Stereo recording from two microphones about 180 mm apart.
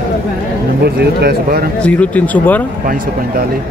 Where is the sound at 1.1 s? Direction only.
60° right (ahead or behind).